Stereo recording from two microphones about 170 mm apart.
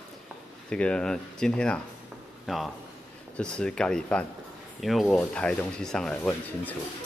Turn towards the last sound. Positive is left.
turn(degrees=5)  # may be behind; listen again after turning